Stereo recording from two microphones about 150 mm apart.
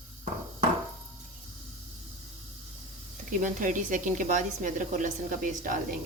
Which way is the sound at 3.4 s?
60° right (ahead or behind).